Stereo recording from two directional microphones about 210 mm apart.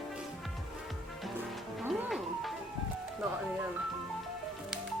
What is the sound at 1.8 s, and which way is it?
Music, centre (ahead or behind).